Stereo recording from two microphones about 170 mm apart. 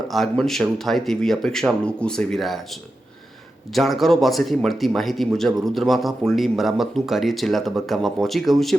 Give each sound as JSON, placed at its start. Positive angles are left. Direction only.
{"t": 0.1, "sound": "speech", "side_deg": 0}
{"t": 3.8, "sound": "speech", "side_deg": 0}